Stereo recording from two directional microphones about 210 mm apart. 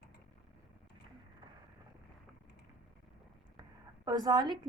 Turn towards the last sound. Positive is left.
turn(degrees=-20)  # may be behind; listen again after turning